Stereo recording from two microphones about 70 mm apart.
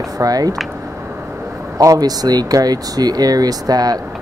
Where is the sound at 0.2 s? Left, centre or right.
Right.